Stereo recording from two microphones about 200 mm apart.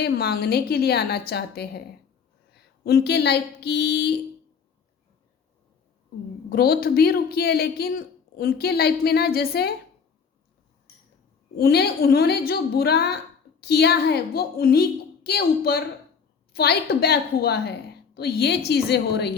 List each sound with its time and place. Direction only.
0.0 s a woman's voice: 50° left (ahead or behind)
2.8 s a woman's voice: 55° left (ahead or behind)
6.5 s a woman's voice: 50° left (ahead or behind)
11.5 s a woman's voice: 50° left (ahead or behind)